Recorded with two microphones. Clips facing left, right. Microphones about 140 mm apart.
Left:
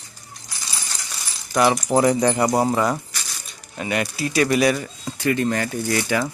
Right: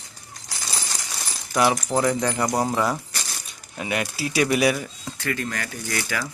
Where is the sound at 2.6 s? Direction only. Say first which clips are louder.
Left 3 dB; centre (ahead or behind).